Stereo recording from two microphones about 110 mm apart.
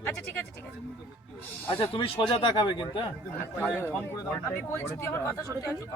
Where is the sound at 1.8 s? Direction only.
55° left (ahead or behind).